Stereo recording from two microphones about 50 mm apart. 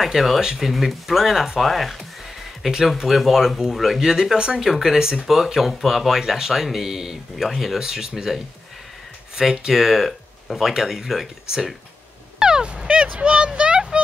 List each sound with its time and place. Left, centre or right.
0.0 s speech: centre
4.6 s speech: centre
12.4 s a sound: centre